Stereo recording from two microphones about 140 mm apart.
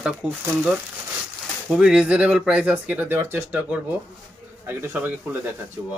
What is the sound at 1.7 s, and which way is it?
Speech, 5° right (ahead or behind).